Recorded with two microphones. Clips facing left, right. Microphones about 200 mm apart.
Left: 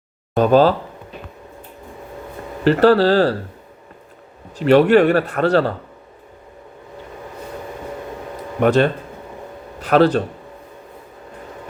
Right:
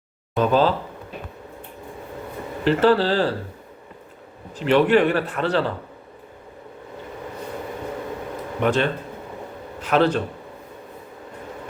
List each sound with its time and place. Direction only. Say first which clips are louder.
0.3 s a man's voice: left 5 dB; 50° left (ahead or behind)
2.6 s speech: left 5 dB; 40° left (ahead or behind)
4.6 s a man's voice: left 5 dB; 40° left (ahead or behind)
8.6 s a man's voice: left 6 dB; 40° left (ahead or behind)